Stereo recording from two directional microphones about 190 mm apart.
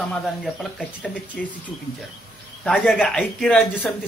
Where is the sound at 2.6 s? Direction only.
Centre (ahead or behind).